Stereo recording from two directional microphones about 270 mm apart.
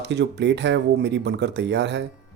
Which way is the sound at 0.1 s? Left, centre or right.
Right.